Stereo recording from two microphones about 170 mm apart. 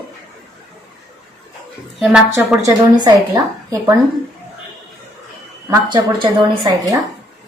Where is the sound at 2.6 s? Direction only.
20° right (ahead or behind).